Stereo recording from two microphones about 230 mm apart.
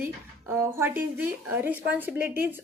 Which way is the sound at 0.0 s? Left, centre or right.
Centre.